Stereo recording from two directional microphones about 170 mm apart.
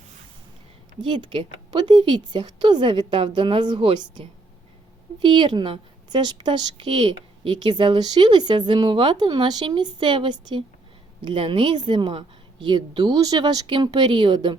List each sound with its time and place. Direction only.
1.0 s a woman's voice: 25° right (ahead or behind)